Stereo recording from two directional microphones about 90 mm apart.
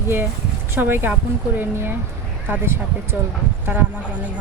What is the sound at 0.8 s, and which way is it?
Speech, 25° right (ahead or behind).